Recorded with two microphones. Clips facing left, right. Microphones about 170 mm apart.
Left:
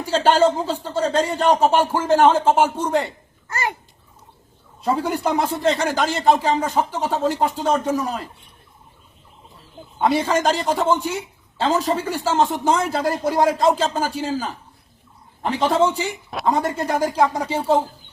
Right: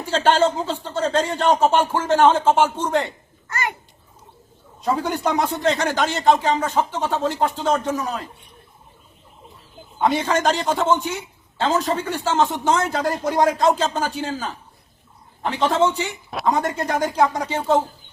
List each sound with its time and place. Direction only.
0.0 s speech: 10° left (ahead or behind)
3.5 s a sound: 30° left (ahead or behind)
4.8 s speech: 5° left (ahead or behind)
10.0 s speech: 5° left (ahead or behind)
15.6 s speech: 5° left (ahead or behind)